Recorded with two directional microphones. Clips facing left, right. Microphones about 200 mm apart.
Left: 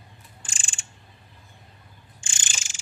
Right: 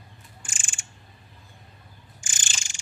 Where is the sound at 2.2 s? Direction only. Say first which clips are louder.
Even; 30° left (ahead or behind).